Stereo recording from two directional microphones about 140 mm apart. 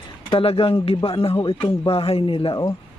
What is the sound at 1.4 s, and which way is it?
Speech, 30° left (ahead or behind).